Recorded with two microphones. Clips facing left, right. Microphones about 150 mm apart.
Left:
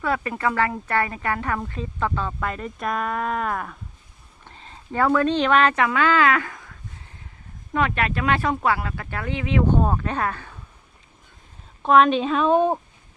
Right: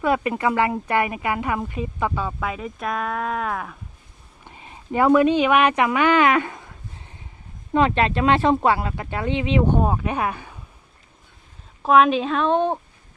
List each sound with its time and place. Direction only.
0.0 s speech: 20° right (ahead or behind); by 3.8 s centre (ahead or behind)
4.4 s speech: 15° right (ahead or behind)
11.8 s speech: 5° right (ahead or behind)